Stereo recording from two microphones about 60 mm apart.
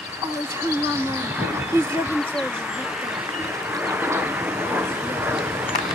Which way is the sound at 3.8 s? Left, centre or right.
Right.